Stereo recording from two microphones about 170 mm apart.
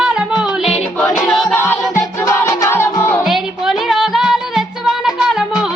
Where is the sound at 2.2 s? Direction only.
20° left (ahead or behind).